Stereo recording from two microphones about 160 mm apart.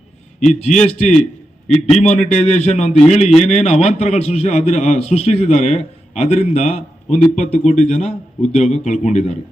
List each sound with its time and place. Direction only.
0.3 s a man's voice: 45° left (ahead or behind)